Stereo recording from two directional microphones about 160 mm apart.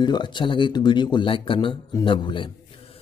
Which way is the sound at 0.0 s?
30° left (ahead or behind).